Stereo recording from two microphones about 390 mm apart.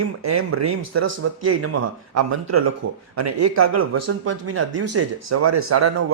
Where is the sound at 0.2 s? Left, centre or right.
Right.